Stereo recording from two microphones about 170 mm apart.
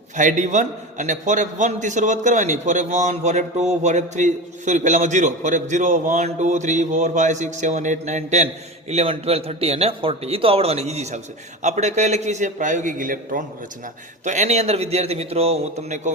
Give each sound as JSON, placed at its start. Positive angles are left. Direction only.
{"t": 0.2, "sound": "a man's voice", "side_deg": -50}